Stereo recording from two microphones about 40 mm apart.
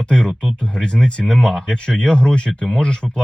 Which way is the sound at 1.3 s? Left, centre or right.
Centre.